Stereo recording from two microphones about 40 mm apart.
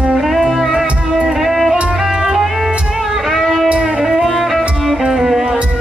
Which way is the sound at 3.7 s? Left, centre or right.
Right.